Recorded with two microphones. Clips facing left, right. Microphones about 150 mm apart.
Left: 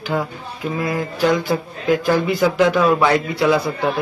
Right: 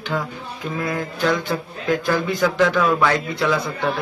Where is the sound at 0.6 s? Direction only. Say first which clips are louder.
Left 3 dB; 5° left (ahead or behind).